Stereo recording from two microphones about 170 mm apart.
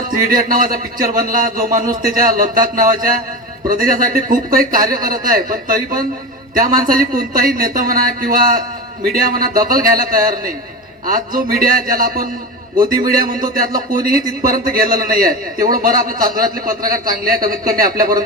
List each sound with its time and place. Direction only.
0.3 s speech: 55° right (ahead or behind)